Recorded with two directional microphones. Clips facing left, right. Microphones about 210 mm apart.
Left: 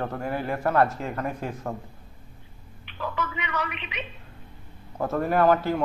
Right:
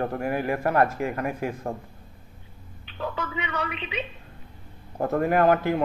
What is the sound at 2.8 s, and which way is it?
Speech, 30° right (ahead or behind).